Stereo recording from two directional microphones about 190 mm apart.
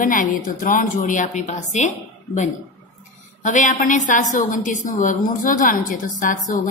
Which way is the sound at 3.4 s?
40° left (ahead or behind).